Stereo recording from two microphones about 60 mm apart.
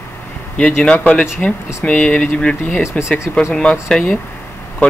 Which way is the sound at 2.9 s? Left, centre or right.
Left.